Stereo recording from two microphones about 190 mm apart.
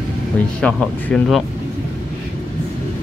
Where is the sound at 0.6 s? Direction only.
5° left (ahead or behind).